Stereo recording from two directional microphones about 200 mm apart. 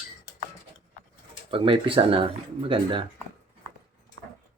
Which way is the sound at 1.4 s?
25° right (ahead or behind).